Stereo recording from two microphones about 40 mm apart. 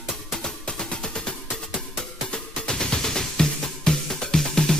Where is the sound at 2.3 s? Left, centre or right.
Centre.